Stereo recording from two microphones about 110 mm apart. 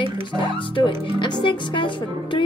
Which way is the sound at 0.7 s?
45° left (ahead or behind).